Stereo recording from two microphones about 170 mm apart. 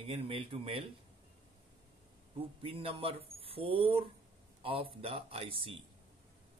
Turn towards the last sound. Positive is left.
turn(degrees=-30)  # may be behind; listen again after turning